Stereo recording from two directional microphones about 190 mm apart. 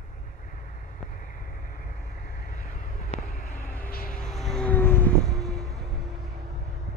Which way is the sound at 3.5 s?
5° left (ahead or behind).